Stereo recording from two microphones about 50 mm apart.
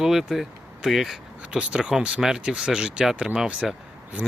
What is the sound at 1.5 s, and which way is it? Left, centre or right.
Speech, right.